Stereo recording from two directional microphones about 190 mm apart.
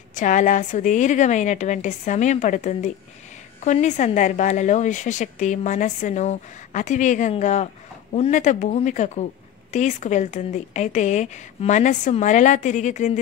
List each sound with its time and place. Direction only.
0.1 s a woman's voice: 40° left (ahead or behind)